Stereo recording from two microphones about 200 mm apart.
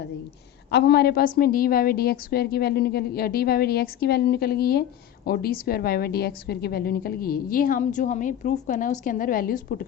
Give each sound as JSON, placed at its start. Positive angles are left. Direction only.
{"t": 0.7, "sound": "a woman's voice", "side_deg": 55}